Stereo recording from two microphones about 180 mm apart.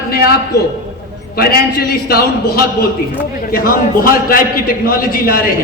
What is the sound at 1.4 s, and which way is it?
Speech, 60° left (ahead or behind).